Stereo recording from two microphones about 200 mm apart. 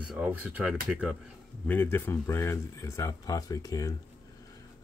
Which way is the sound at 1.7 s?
10° left (ahead or behind).